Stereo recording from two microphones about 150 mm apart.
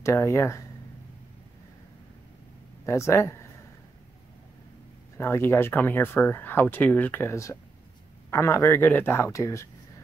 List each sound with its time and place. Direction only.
0.0 s speech: 20° left (ahead or behind)
2.8 s speech: 20° left (ahead or behind)
5.1 s speech: 15° left (ahead or behind)